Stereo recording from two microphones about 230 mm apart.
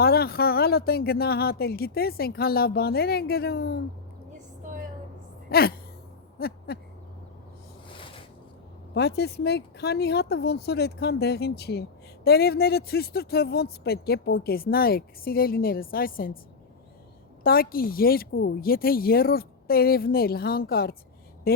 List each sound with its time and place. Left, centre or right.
0.0 s speech: left
5.5 s a sound: left
6.4 s speech: left
9.0 s speech: left
17.4 s speech: left
21.5 s a sound: left